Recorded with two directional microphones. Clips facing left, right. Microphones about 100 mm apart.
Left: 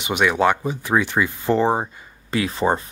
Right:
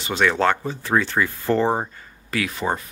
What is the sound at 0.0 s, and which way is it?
Speech, 15° left (ahead or behind).